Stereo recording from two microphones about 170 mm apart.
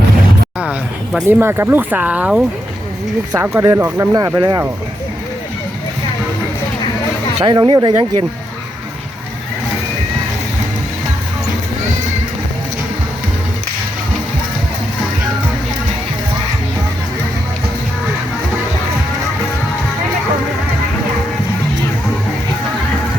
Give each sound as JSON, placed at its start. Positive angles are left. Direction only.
{"t": 0.6, "sound": "a sound", "side_deg": -5}
{"t": 1.2, "sound": "speech", "side_deg": -15}
{"t": 7.4, "sound": "speech", "side_deg": -25}